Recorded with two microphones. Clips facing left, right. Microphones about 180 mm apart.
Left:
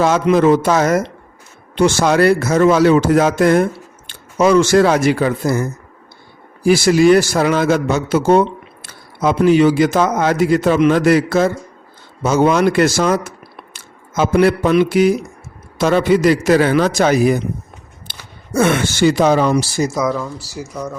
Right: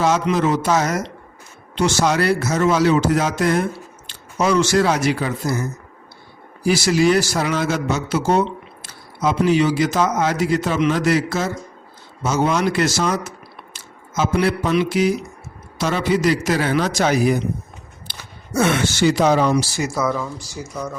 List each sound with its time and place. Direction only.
0.0 s a man's voice: 55° left (ahead or behind)
20.1 s speech: 5° left (ahead or behind)